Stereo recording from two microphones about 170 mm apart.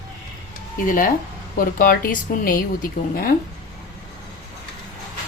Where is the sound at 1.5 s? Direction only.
60° left (ahead or behind).